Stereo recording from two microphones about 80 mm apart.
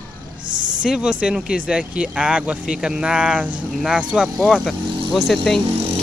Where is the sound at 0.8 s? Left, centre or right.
Centre.